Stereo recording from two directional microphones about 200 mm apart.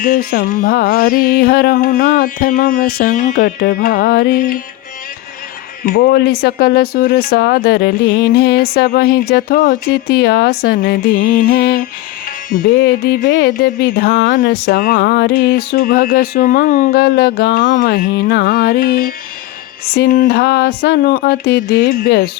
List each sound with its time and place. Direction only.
0.0 s music: 45° left (ahead or behind)
5.8 s music: 45° left (ahead or behind)